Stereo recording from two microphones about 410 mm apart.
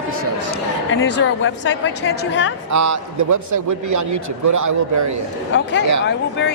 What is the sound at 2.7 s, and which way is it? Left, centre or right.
A man's voice, right.